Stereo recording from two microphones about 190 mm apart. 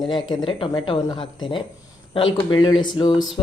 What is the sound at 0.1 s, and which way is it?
Speech, 25° left (ahead or behind).